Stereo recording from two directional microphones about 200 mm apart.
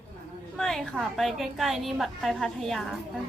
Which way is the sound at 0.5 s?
Centre (ahead or behind).